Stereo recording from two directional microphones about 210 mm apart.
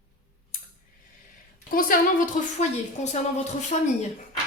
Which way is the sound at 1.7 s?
40° left (ahead or behind).